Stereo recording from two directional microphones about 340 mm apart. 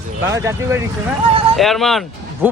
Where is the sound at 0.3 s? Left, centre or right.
Centre.